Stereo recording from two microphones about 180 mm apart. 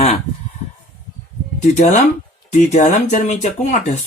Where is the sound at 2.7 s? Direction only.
40° left (ahead or behind).